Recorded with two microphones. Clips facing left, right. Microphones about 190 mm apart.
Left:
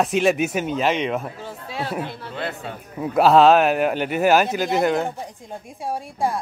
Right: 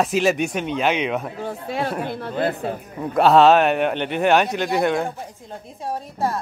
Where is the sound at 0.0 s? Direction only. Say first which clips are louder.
Even; centre (ahead or behind).